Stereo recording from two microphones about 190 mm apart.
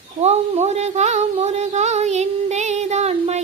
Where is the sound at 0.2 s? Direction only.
35° right (ahead or behind).